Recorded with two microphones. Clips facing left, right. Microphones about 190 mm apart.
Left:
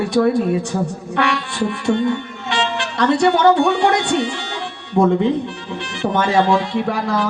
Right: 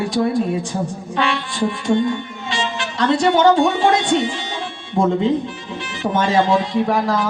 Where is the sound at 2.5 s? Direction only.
65° left (ahead or behind).